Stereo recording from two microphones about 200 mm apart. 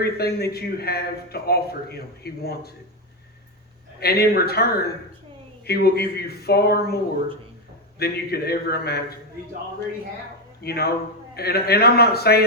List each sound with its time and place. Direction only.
0.0 s a man's voice: 50° left (ahead or behind)
4.0 s a man's voice: 50° left (ahead or behind)
10.6 s a man's voice: 50° left (ahead or behind)